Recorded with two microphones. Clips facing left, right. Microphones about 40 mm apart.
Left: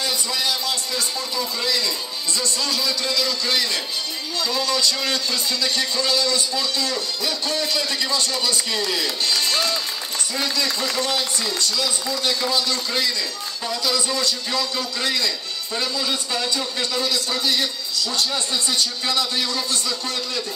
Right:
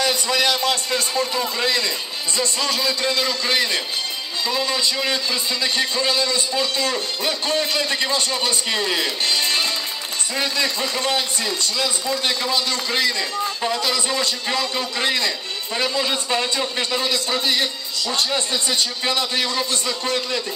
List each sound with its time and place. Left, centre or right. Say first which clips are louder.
0.0 s a man's voice: right 5 dB; right